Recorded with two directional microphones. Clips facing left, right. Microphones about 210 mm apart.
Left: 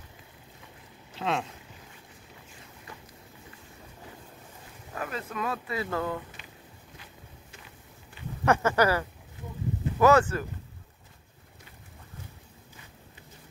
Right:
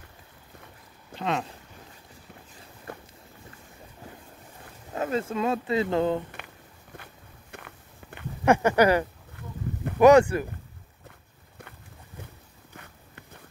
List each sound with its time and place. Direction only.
1.1 s speech: centre (ahead or behind)
2.9 s boat: 55° right (ahead or behind)
4.9 s speech: 25° right (ahead or behind)
7.5 s walk: 60° right (ahead or behind)
8.5 s speech: 15° right (ahead or behind)
12.7 s a sound: 60° right (ahead or behind)